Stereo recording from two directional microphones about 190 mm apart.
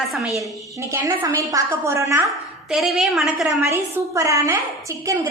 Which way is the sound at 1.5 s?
15° right (ahead or behind).